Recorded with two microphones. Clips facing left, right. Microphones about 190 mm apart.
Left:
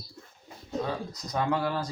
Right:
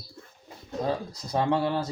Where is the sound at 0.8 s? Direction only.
45° right (ahead or behind).